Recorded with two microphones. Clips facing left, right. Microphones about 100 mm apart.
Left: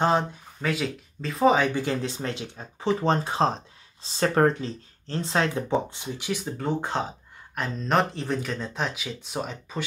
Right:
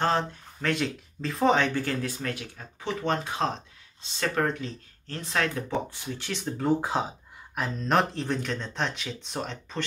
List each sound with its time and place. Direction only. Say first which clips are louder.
0.0 s speech: left 3 dB; 10° left (ahead or behind)
1.7 s speech: left 2 dB; 15° left (ahead or behind)